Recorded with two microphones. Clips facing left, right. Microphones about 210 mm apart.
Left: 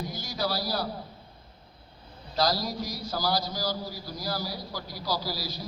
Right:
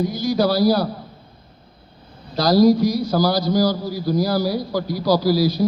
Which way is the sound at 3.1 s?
60° right (ahead or behind).